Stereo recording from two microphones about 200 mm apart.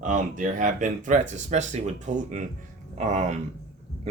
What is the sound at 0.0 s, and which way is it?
Speech, 40° right (ahead or behind).